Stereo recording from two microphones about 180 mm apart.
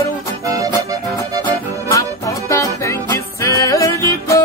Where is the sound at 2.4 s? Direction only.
15° left (ahead or behind).